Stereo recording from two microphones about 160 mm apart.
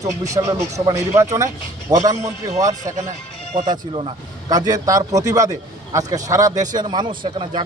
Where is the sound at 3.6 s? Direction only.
30° right (ahead or behind).